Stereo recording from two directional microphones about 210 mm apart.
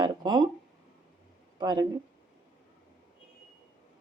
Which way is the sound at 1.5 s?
20° right (ahead or behind).